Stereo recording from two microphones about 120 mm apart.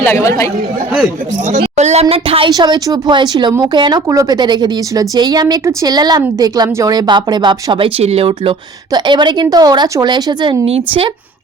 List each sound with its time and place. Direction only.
0.0 s speech: 20° left (ahead or behind)
1.7 s speech: 70° right (ahead or behind); by 2.5 s 50° right (ahead or behind)
2.5 s a woman's voice: 35° right (ahead or behind); by 8.5 s 60° right (ahead or behind)
8.9 s a woman's voice: 40° right (ahead or behind)